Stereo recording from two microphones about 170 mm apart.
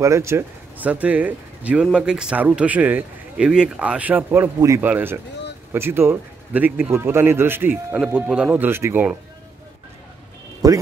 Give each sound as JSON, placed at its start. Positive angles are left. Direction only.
{"t": 0.0, "sound": "speech", "side_deg": -15}
{"t": 10.6, "sound": "speech", "side_deg": -20}